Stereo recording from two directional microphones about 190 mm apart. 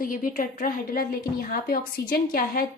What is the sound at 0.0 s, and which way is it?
A woman's voice, 45° left (ahead or behind).